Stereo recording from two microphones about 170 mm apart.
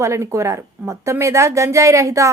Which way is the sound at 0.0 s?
15° right (ahead or behind).